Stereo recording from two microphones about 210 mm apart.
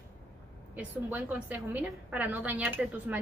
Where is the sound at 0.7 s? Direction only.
5° right (ahead or behind).